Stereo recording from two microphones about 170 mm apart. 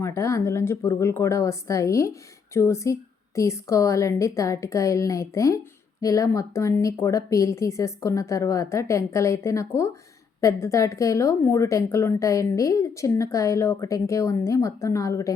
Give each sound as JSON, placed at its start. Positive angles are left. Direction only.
{"t": 0.0, "sound": "a woman's voice", "side_deg": 15}